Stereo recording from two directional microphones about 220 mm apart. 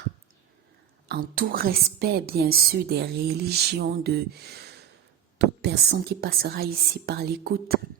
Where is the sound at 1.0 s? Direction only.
45° right (ahead or behind).